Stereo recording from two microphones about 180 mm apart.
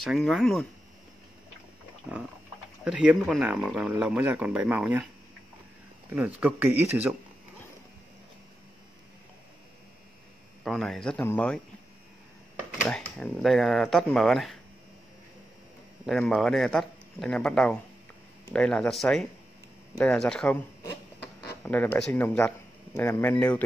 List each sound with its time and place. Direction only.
0.0 s speech: centre (ahead or behind)
2.1 s speech: centre (ahead or behind)
6.1 s speech: 10° right (ahead or behind)
10.6 s speech: centre (ahead or behind)
12.8 s speech: 5° left (ahead or behind)
16.1 s speech: centre (ahead or behind)
21.4 s a sound: 5° left (ahead or behind)
22.1 s speech: 10° left (ahead or behind)